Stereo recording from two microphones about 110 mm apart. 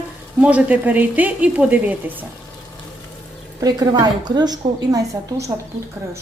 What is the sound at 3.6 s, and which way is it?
A woman's voice, 35° right (ahead or behind).